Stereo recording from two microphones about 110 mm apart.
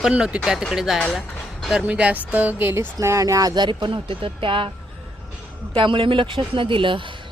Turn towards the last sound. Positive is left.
turn(degrees=-50)  # may be behind; listen again after turning